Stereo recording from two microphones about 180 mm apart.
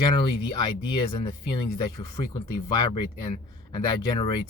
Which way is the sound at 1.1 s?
25° left (ahead or behind).